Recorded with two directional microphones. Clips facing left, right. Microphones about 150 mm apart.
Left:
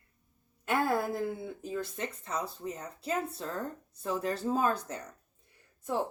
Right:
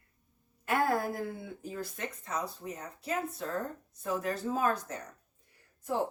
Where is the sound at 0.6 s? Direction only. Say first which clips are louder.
Even; 25° left (ahead or behind).